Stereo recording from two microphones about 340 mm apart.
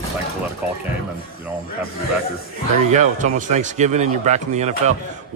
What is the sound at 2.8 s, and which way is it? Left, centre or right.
A man's voice, right.